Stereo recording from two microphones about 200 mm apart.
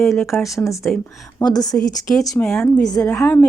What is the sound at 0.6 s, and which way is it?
Speech, 15° left (ahead or behind).